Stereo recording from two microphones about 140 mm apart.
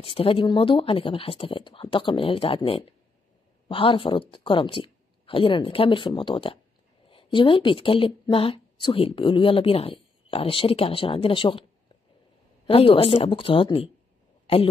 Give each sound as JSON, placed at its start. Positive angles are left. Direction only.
{"t": 0.0, "sound": "a woman's voice", "side_deg": 40}
{"t": 12.6, "sound": "a woman's voice", "side_deg": 45}